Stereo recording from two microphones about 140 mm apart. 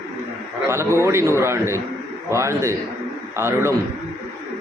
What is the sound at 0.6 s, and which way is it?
A man's voice, 20° right (ahead or behind).